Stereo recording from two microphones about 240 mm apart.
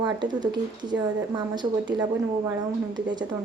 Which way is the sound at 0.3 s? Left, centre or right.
Centre.